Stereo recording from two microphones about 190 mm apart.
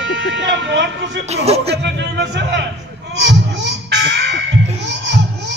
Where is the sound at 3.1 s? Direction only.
65° right (ahead or behind).